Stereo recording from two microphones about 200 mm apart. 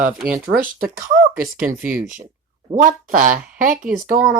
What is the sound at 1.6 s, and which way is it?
Speech, 5° right (ahead or behind).